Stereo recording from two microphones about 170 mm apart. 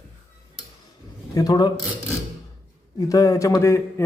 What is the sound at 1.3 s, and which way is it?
Speech, 20° left (ahead or behind).